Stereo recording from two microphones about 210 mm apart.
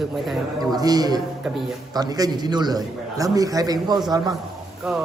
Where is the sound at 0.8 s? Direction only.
20° right (ahead or behind).